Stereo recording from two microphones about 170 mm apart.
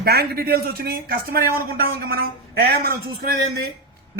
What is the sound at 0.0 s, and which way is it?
A man's voice, 70° right (ahead or behind).